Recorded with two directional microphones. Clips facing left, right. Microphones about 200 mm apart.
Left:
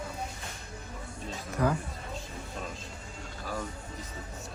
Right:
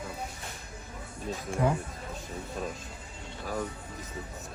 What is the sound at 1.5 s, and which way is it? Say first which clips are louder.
Speech: even; 25° right (ahead or behind).